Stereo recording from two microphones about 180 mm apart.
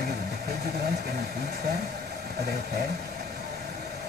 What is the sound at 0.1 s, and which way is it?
Vehicle, 65° right (ahead or behind).